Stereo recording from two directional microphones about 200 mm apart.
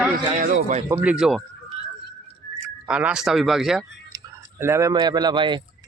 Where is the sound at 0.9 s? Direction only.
5° right (ahead or behind).